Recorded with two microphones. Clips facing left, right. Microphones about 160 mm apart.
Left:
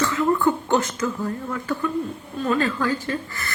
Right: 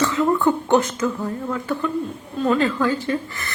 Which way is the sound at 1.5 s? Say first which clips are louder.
Right 1 dB; 20° right (ahead or behind).